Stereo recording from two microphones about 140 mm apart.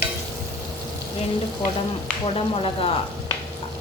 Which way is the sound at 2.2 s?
45° left (ahead or behind).